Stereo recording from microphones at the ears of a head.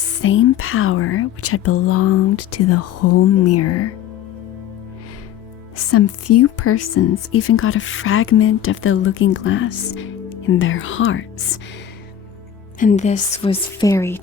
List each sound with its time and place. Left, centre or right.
0.0 s a woman's voice: left
5.7 s a woman's voice: left
12.8 s a woman's voice: left